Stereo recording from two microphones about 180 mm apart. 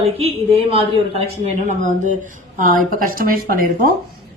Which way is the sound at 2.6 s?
50° right (ahead or behind).